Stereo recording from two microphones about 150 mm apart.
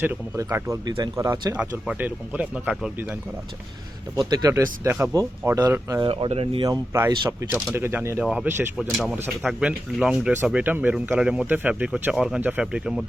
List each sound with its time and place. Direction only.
0.0 s speech: 15° right (ahead or behind)
1.5 s speech: 10° right (ahead or behind)
4.1 s speech: 25° right (ahead or behind)
6.0 s speech: 35° right (ahead or behind)
6.7 s speech: 20° right (ahead or behind)
8.2 s speech: 5° right (ahead or behind)